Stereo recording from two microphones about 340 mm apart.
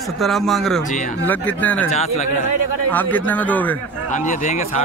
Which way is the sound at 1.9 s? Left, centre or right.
Centre.